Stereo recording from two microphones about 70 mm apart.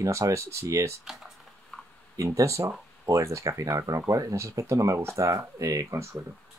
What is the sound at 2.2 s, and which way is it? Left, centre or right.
Speech, right.